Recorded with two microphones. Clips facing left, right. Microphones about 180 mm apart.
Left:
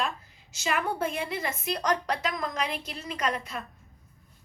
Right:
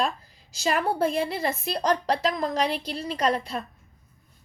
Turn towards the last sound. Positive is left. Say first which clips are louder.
# right 6 dB
turn(degrees=-30)  # may be behind; listen again after turning